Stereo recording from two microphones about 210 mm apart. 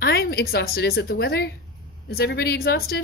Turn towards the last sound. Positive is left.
turn(degrees=45)  # may be behind; listen again after turning